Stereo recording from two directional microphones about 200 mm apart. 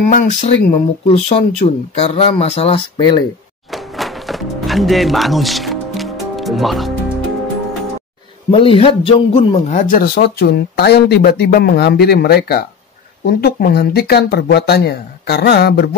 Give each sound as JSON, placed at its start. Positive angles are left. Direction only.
{"t": 0.1, "sound": "speech", "side_deg": 40}
{"t": 3.7, "sound": "music", "side_deg": 0}
{"t": 8.5, "sound": "a man's voice", "side_deg": 25}